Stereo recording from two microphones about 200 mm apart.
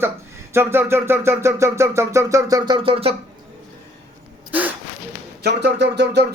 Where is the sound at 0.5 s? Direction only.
10° right (ahead or behind); by 3.1 s 25° right (ahead or behind).